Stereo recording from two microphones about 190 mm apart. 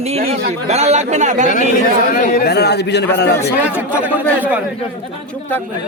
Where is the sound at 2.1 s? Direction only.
50° left (ahead or behind).